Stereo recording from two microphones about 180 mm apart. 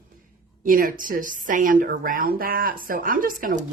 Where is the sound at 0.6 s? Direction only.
50° right (ahead or behind).